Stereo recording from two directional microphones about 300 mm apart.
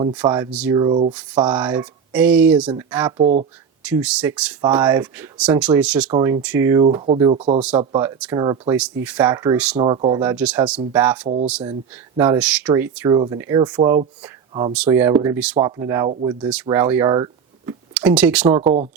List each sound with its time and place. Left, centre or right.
0.3 s speech: centre
0.8 s speech: centre
1.5 s speech: centre
3.2 s speech: right
3.8 s speech: centre
6.1 s speech: centre
6.8 s speech: centre